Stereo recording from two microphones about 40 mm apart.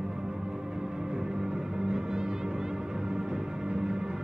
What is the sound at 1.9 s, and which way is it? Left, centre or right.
Music, centre.